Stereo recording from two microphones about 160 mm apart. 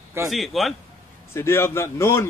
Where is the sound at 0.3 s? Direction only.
Centre (ahead or behind).